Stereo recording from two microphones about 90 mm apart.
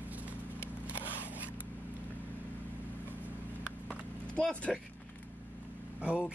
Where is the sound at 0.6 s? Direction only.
25° left (ahead or behind).